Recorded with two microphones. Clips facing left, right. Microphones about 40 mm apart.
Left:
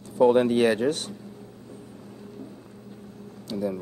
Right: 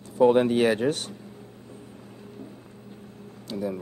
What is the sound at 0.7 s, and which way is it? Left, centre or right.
Speech, right.